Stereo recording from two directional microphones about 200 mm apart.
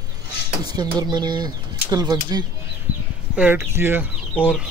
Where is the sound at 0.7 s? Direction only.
20° right (ahead or behind).